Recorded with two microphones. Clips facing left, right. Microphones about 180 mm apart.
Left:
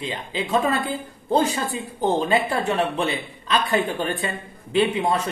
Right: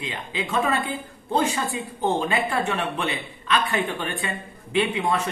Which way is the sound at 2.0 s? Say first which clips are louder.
Left 3 dB; 35° left (ahead or behind).